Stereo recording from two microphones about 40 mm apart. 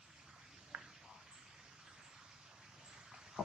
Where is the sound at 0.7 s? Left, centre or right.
Right.